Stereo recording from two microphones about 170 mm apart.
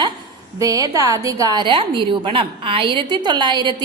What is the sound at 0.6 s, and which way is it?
A woman's voice, 20° right (ahead or behind).